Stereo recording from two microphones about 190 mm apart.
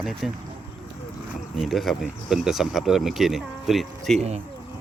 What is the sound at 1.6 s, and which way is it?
Speech, centre (ahead or behind).